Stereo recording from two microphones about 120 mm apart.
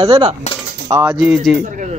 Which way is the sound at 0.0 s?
50° right (ahead or behind).